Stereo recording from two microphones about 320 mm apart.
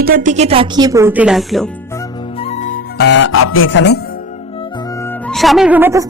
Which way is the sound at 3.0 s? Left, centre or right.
Left.